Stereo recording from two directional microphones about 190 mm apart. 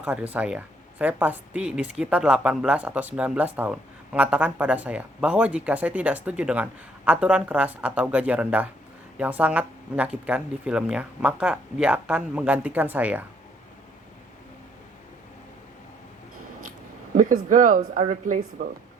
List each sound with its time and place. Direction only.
0.0 s a woman's voice: 10° right (ahead or behind)
17.2 s speech: 45° right (ahead or behind)